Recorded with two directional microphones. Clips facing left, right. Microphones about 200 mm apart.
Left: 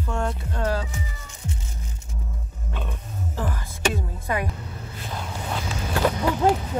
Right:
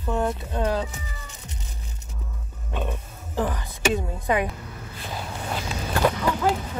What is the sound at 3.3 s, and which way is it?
Speech, 20° right (ahead or behind).